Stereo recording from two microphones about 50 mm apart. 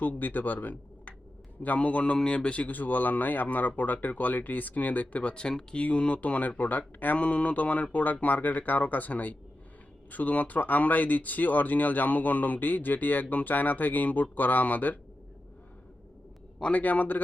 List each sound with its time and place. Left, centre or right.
0.2 s speech: left
16.7 s speech: left